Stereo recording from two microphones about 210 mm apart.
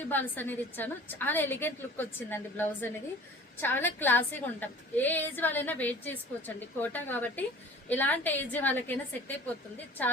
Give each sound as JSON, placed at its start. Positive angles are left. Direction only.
{"t": 0.0, "sound": "a woman's voice", "side_deg": 10}